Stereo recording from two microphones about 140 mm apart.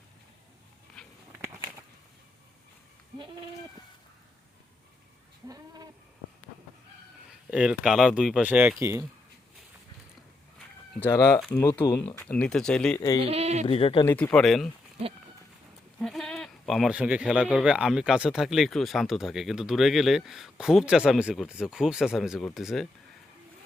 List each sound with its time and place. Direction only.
5.5 s cat: 30° right (ahead or behind)
7.3 s speech: 5° right (ahead or behind)
11.0 s speech: 20° left (ahead or behind)
11.7 s speech: 30° left (ahead or behind)
12.0 s speech: 15° left (ahead or behind)
13.0 s speech: 25° left (ahead or behind)
13.2 s speech: 50° right (ahead or behind)
13.7 s speech: 40° left (ahead or behind)
14.0 s speech: 20° left (ahead or behind); by 14.7 s centre (ahead or behind)
16.0 s bleat: centre (ahead or behind)
17.3 s speech: 5° right (ahead or behind)